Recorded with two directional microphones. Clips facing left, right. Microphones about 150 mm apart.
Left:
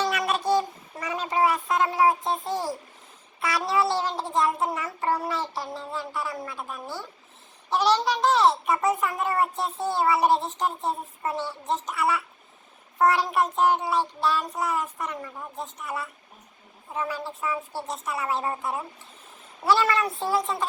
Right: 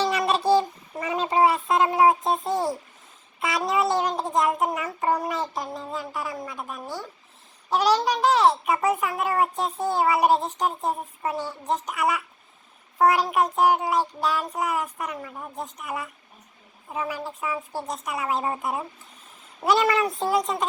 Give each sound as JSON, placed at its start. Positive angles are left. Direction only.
{"t": 0.0, "sound": "child singing", "side_deg": -30}
{"t": 3.4, "sound": "a sound", "side_deg": -20}
{"t": 7.7, "sound": "a child's voice", "side_deg": -10}